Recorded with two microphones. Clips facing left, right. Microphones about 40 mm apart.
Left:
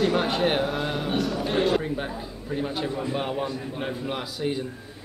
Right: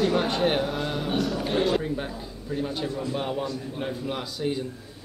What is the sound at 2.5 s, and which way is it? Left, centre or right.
Speech, centre.